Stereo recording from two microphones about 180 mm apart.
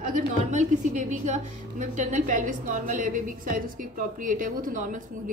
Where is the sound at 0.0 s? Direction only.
45° right (ahead or behind).